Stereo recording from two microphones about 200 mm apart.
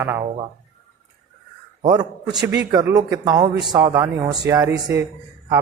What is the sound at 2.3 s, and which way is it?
Speech, 15° right (ahead or behind).